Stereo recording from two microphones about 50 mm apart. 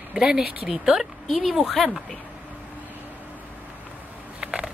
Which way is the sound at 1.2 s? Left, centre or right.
Centre.